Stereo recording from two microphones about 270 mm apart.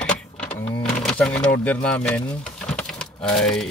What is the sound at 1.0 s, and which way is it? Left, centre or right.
Speech, centre.